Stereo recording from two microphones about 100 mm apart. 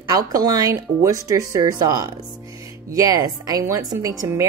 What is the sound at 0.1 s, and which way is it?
Speech, 40° right (ahead or behind).